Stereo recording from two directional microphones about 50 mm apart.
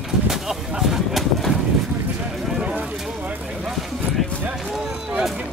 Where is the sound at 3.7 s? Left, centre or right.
Centre.